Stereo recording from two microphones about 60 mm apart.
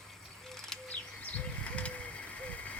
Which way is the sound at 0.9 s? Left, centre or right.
Left.